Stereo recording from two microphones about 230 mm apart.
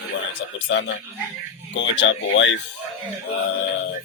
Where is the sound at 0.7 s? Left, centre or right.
Left.